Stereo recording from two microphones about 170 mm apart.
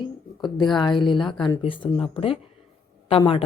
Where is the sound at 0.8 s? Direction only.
25° left (ahead or behind).